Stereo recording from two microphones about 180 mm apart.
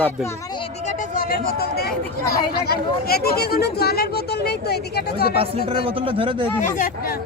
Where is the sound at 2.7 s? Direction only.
60° left (ahead or behind).